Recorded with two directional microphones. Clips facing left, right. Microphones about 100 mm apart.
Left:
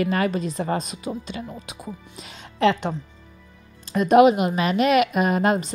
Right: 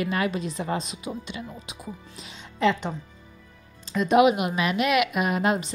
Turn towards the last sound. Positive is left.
turn(degrees=45)  # may be behind; listen again after turning